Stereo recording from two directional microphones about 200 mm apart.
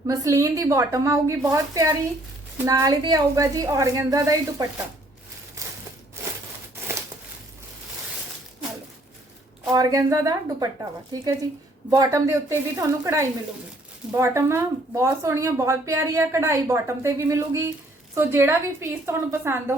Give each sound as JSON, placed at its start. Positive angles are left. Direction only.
{"t": 0.1, "sound": "a woman's voice", "side_deg": -15}
{"t": 9.6, "sound": "a woman's voice", "side_deg": -20}